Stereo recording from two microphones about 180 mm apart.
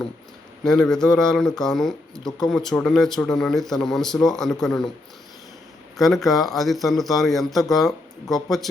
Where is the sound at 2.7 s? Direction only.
5° left (ahead or behind).